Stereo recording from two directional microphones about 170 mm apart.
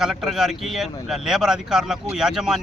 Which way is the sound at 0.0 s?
Centre (ahead or behind).